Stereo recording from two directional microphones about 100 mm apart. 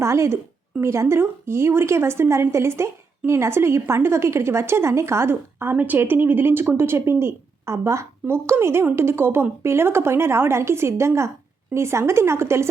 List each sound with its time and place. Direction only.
0.0 s a woman's voice: 30° right (ahead or behind)